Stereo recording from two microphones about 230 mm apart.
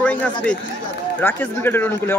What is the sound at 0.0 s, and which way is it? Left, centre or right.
Speech, centre.